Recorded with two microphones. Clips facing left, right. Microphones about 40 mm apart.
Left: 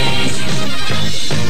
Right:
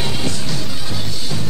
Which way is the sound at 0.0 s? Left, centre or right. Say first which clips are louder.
Left 5 dB; left.